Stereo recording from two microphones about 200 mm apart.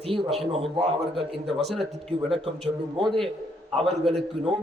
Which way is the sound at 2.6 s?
25° right (ahead or behind).